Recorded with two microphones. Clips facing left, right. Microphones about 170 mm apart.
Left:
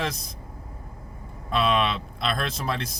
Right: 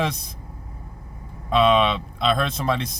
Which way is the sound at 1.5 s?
Centre (ahead or behind).